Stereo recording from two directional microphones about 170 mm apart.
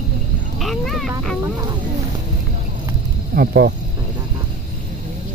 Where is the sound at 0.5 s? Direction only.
Centre (ahead or behind).